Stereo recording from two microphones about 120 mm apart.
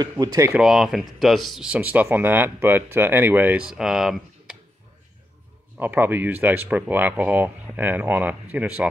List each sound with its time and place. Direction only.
0.2 s speech: 25° right (ahead or behind)
0.6 s speech: 5° right (ahead or behind)
5.8 s speech: 15° right (ahead or behind)